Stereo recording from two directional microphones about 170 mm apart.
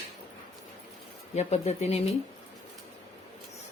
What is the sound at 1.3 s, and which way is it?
Speech, 40° left (ahead or behind).